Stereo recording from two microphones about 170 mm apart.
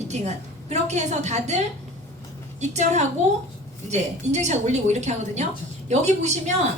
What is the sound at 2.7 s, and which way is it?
A woman's voice, 45° right (ahead or behind).